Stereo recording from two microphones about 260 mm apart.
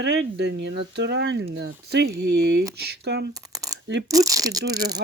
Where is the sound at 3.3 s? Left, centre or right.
Centre.